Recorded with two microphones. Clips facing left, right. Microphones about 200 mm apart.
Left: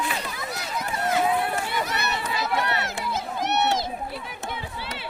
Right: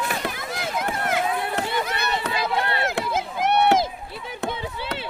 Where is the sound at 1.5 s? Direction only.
55° right (ahead or behind).